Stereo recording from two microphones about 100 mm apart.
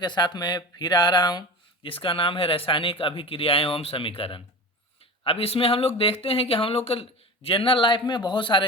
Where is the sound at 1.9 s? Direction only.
65° left (ahead or behind).